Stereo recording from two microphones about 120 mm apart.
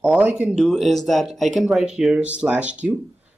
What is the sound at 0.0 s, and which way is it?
Speech, 10° right (ahead or behind).